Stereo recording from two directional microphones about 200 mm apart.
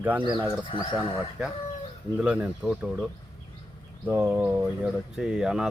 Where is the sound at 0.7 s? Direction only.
25° left (ahead or behind).